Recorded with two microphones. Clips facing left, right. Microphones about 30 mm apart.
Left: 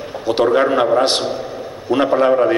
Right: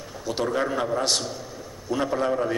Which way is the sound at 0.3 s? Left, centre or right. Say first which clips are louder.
Left 11 dB; left.